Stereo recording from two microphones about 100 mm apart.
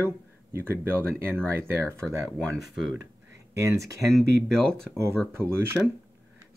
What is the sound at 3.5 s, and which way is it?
Speech, 30° right (ahead or behind).